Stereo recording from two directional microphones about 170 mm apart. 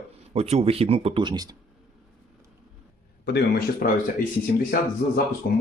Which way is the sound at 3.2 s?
80° left.